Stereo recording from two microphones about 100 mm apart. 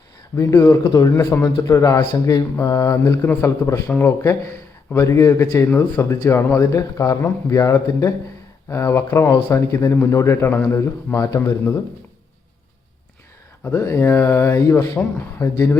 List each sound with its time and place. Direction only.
0.3 s speech: 35° left (ahead or behind)
13.7 s speech: 30° left (ahead or behind)